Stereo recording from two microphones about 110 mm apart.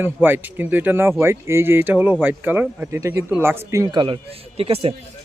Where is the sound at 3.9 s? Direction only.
50° right (ahead or behind).